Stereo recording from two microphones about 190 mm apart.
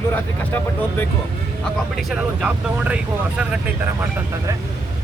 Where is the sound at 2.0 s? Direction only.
Centre (ahead or behind).